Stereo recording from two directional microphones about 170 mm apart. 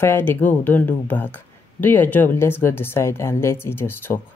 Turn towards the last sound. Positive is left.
turn(degrees=15)  # may be behind; listen again after turning